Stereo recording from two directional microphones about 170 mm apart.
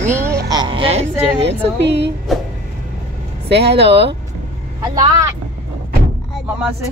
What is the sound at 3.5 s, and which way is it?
Speech, 80° right.